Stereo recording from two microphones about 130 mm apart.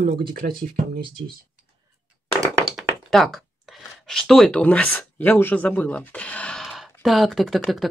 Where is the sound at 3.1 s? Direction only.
Centre (ahead or behind).